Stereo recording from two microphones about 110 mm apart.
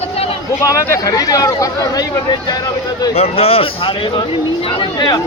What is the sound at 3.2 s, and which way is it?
Speech, 65° left (ahead or behind).